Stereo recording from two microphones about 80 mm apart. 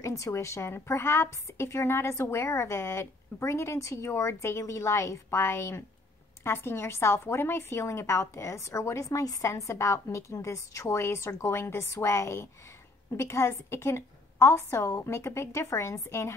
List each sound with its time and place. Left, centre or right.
0.0 s a woman's voice: left